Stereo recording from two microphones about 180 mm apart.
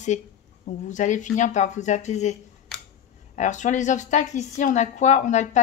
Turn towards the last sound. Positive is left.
turn(degrees=40)  # may be behind; listen again after turning